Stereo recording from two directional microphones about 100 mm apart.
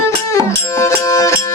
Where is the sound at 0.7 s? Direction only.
30° left (ahead or behind).